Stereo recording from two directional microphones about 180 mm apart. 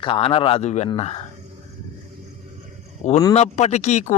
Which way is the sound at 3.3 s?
35° left (ahead or behind).